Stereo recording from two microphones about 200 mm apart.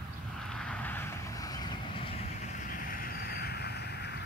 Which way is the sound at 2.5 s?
45° left (ahead or behind).